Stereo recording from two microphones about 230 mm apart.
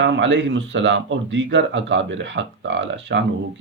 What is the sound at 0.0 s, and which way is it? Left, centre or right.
Speech, right.